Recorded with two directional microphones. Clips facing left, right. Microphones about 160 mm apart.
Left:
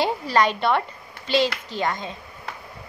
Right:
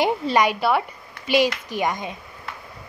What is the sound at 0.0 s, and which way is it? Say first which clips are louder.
A woman's voice: right 1 dB; 15° right (ahead or behind).